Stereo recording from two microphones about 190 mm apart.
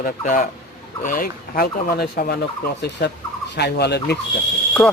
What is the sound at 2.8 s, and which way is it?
Fowl, 60° left (ahead or behind).